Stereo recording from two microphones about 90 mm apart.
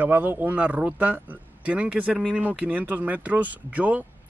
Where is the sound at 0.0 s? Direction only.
20° right (ahead or behind).